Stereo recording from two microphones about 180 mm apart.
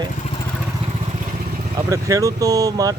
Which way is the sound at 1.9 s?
15° right (ahead or behind).